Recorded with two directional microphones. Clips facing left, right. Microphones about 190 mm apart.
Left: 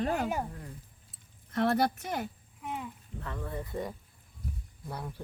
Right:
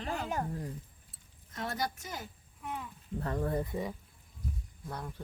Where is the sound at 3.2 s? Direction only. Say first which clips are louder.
Right 6 dB; 40° right (ahead or behind).